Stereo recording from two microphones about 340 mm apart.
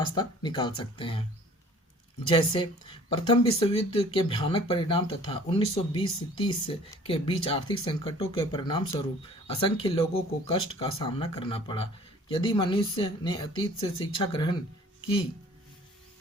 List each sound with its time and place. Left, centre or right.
0.1 s speech: centre
2.2 s speech: centre